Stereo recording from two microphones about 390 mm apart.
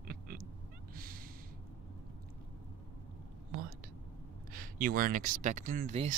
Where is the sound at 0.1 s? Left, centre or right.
Right.